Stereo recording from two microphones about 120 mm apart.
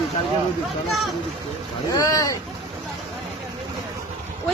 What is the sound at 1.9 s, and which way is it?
Speech, 30° left (ahead or behind).